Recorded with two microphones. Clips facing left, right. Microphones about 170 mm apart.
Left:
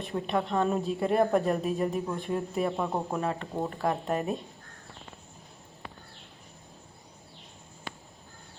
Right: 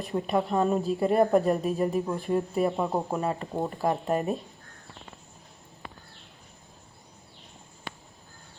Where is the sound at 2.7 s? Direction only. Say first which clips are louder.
Right 3 dB; 15° right (ahead or behind).